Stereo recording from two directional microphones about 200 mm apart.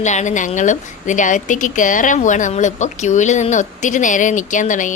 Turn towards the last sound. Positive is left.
turn(degrees=40)  # may be behind; listen again after turning